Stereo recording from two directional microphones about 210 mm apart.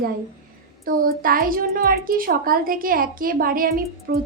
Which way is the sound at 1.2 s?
45° right (ahead or behind).